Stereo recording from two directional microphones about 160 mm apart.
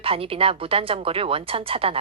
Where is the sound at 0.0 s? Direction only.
35° right (ahead or behind).